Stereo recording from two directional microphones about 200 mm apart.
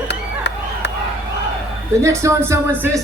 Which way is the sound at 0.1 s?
60° left (ahead or behind).